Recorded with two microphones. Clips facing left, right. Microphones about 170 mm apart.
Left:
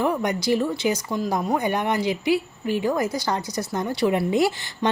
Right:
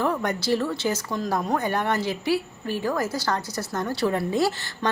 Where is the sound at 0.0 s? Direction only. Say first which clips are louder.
Left 2 dB; 15° left (ahead or behind).